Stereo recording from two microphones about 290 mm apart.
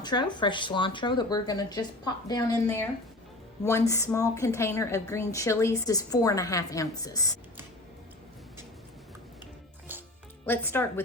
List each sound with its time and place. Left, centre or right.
0.0 s a woman's voice: centre
9.9 s music: centre
10.4 s a woman's voice: centre